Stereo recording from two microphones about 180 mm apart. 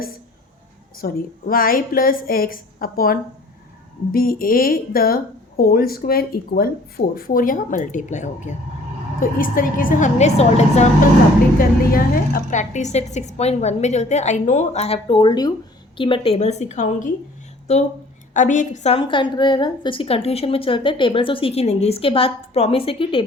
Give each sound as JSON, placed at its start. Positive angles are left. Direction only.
{"t": 0.9, "sound": "a woman's voice", "side_deg": 55}
{"t": 11.9, "sound": "a woman's voice", "side_deg": 55}